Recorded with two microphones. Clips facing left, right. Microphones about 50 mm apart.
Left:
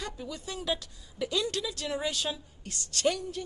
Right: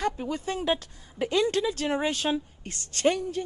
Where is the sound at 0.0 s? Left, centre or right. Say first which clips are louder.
Right 9 dB; right.